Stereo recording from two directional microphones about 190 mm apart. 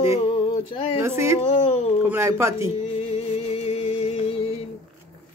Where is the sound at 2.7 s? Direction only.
30° left (ahead or behind).